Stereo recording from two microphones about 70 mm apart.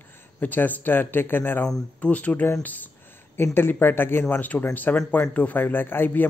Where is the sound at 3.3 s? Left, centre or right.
Left.